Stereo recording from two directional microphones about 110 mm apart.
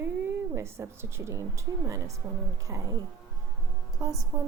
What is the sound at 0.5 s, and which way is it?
Speech, 25° right (ahead or behind).